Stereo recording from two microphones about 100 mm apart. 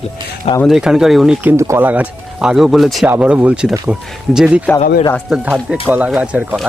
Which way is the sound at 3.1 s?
20° right (ahead or behind).